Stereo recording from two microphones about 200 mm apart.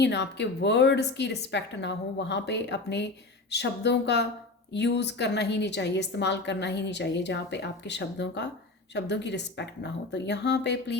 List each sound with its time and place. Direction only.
0.0 s a woman's voice: 60° left (ahead or behind)